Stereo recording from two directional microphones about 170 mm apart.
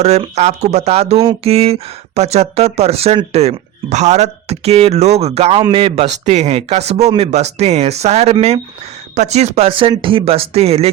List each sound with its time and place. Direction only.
0.0 s speech: 40° right (ahead or behind)